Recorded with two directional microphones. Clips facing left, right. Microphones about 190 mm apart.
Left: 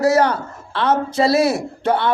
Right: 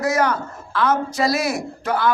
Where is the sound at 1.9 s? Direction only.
30° left (ahead or behind).